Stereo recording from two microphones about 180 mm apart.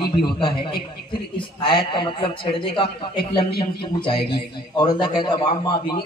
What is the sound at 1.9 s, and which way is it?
A man's voice, 30° left (ahead or behind).